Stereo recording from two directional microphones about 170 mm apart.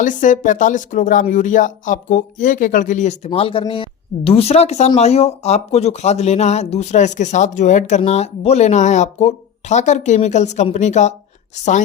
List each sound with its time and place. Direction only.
0.0 s speech: 50° left (ahead or behind)
3.2 s speech: 35° left (ahead or behind)